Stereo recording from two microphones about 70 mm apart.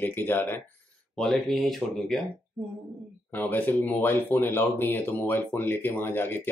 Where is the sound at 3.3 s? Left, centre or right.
Left.